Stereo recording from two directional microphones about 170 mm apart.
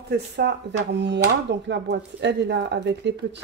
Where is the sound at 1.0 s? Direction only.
90° right.